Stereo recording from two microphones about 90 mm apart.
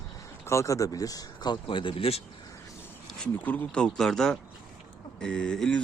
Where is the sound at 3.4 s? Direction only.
20° left (ahead or behind).